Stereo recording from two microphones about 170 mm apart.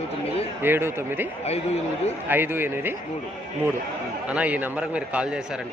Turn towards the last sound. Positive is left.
turn(degrees=-5)  # may be behind; listen again after turning